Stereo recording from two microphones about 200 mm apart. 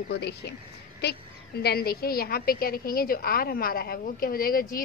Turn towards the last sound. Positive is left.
turn(degrees=45)  # may be behind; listen again after turning